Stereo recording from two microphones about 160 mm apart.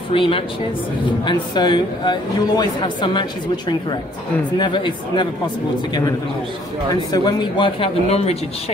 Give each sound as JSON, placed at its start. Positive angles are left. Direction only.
{"t": 0.1, "sound": "a man's voice", "side_deg": 35}
{"t": 6.9, "sound": "speech", "side_deg": 25}